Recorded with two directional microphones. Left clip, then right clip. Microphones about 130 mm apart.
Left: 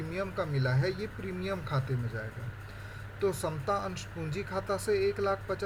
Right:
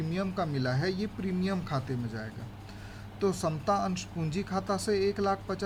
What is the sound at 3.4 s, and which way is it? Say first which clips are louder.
Speech: right 3 dB; 30° right (ahead or behind).